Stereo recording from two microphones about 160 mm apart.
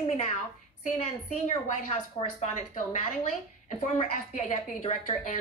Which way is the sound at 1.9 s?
45° left (ahead or behind).